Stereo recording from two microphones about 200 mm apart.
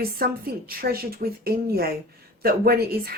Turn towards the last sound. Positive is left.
turn(degrees=-50)  # may be behind; listen again after turning